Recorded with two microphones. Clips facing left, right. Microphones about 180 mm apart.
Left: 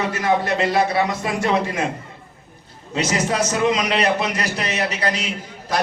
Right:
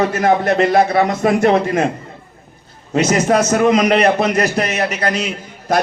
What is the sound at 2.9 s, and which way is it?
A man's voice, 50° right (ahead or behind).